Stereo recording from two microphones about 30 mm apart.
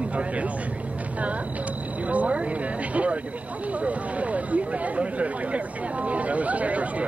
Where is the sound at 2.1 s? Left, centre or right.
Right.